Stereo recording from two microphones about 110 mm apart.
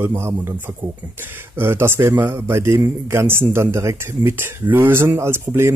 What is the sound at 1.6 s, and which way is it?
A man's voice, 20° right (ahead or behind).